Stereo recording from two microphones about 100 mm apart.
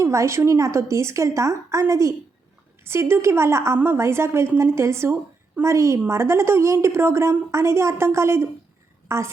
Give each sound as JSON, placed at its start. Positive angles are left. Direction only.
{"t": 0.0, "sound": "a woman's voice", "side_deg": -30}